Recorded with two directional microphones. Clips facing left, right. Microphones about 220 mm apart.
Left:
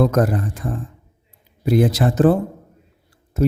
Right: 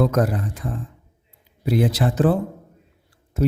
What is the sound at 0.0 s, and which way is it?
Speech, 45° left (ahead or behind).